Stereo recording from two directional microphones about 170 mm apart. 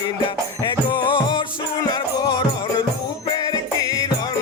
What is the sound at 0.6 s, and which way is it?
Music, 25° left (ahead or behind).